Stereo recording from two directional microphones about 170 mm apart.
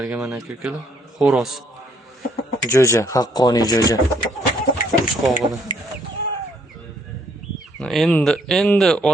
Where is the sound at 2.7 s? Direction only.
15° left (ahead or behind).